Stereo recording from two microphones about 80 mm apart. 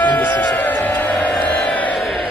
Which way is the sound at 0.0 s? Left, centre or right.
Left.